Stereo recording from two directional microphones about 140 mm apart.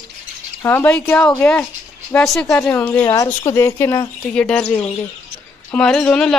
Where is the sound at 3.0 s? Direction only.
25° left (ahead or behind).